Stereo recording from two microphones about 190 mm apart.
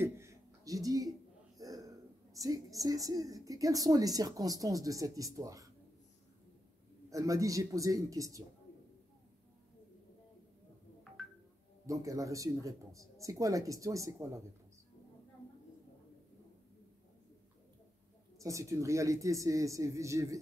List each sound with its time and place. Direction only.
0.0 s a sound: 15° right (ahead or behind)
1.6 s a woman's voice: 20° right (ahead or behind)
7.1 s speech: 15° right (ahead or behind)
11.8 s speech: 15° right (ahead or behind)
18.4 s speech: 15° right (ahead or behind)